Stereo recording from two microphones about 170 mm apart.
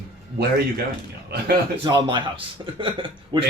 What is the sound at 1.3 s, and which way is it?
Speech, 70° right (ahead or behind).